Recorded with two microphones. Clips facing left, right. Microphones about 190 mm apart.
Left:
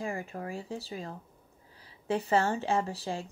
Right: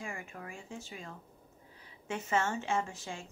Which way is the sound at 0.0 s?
35° left (ahead or behind).